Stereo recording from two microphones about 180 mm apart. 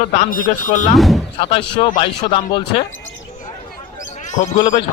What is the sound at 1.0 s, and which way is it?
Speech, centre (ahead or behind).